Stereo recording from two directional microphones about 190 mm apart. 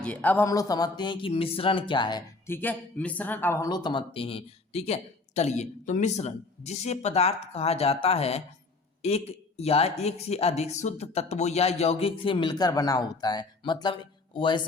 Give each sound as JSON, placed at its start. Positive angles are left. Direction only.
{"t": 0.0, "sound": "speech", "side_deg": 10}
{"t": 2.6, "sound": "speech", "side_deg": 10}